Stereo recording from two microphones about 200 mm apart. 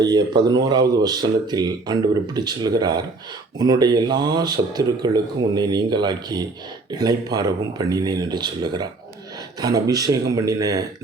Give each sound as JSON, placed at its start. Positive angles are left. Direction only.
{"t": 0.0, "sound": "speech", "side_deg": -20}